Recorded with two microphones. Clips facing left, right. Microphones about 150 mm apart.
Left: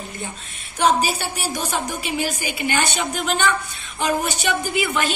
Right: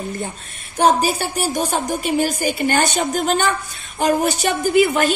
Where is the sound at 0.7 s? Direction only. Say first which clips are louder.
Right 3 dB; 45° right (ahead or behind).